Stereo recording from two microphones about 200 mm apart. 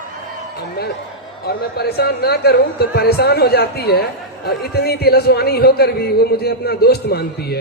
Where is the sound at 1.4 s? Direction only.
55° left (ahead or behind).